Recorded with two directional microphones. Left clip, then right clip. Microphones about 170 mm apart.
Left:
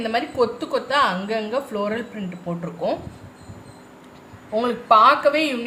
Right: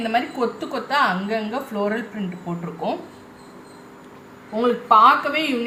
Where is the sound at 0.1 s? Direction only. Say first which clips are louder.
Left 2 dB; 40° left (ahead or behind).